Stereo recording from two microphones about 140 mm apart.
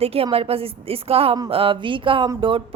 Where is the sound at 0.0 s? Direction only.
45° right (ahead or behind).